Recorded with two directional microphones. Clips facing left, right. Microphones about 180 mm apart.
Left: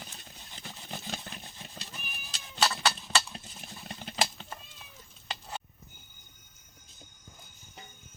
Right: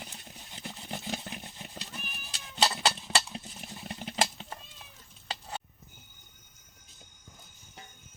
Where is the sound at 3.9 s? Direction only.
20° right (ahead or behind).